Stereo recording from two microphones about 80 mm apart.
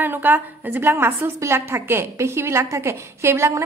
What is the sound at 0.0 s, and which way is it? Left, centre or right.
A woman's voice, right.